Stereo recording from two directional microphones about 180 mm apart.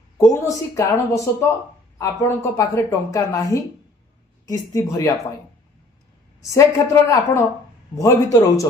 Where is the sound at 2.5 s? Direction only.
15° left (ahead or behind).